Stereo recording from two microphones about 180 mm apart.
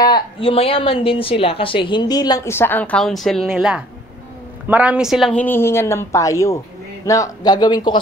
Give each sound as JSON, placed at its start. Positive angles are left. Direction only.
{"t": 0.0, "sound": "a woman's voice", "side_deg": 25}